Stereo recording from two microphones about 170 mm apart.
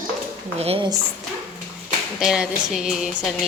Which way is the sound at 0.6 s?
35° right (ahead or behind).